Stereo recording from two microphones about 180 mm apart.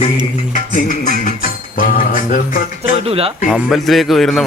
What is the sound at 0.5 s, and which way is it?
Music, 45° left (ahead or behind).